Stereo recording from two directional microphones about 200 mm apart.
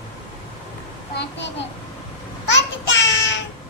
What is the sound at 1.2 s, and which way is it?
Speech, 60° left (ahead or behind).